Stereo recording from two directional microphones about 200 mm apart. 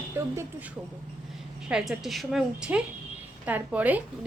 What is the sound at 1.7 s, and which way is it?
A woman's voice, centre (ahead or behind).